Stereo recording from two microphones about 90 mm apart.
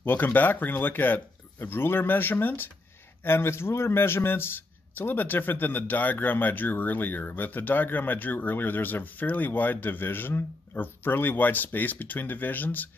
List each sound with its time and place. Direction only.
0.0 s a man's voice: 20° left (ahead or behind)